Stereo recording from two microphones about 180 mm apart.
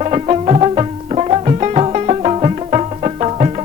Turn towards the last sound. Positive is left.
turn(degrees=-35)  # may be behind; listen again after turning